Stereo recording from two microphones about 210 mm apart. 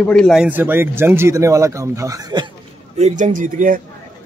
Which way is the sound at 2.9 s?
35° right (ahead or behind).